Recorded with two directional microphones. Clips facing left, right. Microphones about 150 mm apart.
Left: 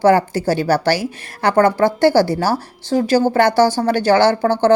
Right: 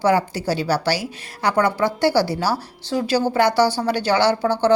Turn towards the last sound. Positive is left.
turn(degrees=50)  # may be behind; listen again after turning